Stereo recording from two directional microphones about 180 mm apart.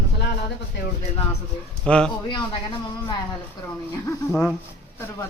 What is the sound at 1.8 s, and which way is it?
Speech, 5° left (ahead or behind).